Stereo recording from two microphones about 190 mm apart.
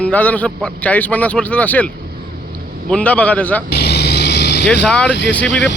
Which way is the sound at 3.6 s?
60° left (ahead or behind).